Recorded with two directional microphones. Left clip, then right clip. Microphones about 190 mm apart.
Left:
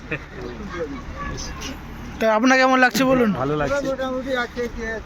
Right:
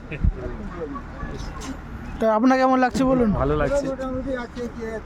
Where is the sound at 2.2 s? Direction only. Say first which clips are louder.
Left 2 dB; 25° right (ahead or behind).